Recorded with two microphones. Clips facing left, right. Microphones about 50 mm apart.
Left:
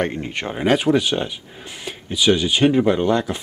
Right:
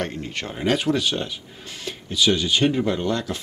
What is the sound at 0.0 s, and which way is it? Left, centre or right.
Speech, centre.